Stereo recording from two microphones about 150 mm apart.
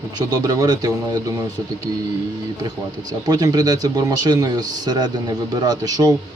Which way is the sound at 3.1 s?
25° right (ahead or behind).